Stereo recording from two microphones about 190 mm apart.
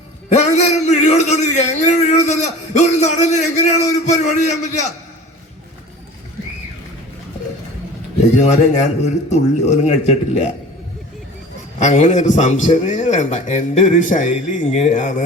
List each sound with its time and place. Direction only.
0.3 s a man's voice: 35° left (ahead or behind)
8.4 s a man's voice: 40° left (ahead or behind)
11.8 s a man's voice: 40° left (ahead or behind)